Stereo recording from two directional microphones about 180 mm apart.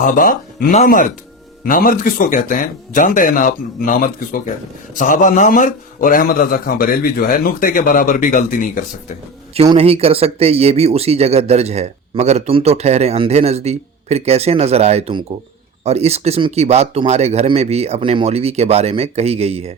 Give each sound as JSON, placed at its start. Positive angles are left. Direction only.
{"t": 0.0, "sound": "a man's voice", "side_deg": 50}
{"t": 9.6, "sound": "speech", "side_deg": -30}